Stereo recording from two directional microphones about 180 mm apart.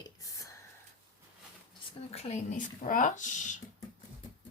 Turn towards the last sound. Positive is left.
turn(degrees=45)  # may be behind; listen again after turning